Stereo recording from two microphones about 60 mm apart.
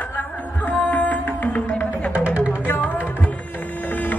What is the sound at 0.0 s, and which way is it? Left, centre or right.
Music, left.